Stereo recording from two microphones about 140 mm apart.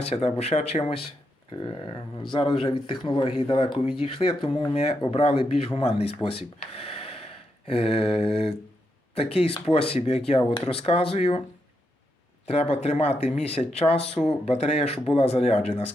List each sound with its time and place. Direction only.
0.0 s speech: 50° left (ahead or behind)
2.3 s speech: 40° left (ahead or behind)
12.5 s speech: 45° left (ahead or behind)